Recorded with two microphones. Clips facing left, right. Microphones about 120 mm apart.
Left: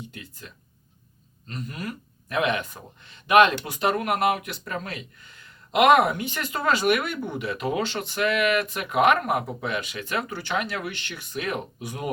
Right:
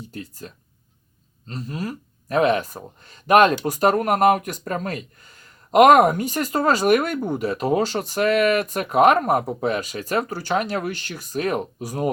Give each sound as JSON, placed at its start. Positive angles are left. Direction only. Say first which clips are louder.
{"t": 0.0, "sound": "speech", "louder": "right 6 dB", "side_deg": -40}